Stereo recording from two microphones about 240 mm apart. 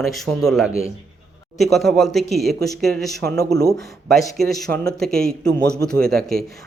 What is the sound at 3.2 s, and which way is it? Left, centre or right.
Speech, right.